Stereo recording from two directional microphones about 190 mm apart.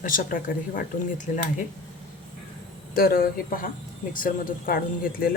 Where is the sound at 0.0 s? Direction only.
45° left (ahead or behind).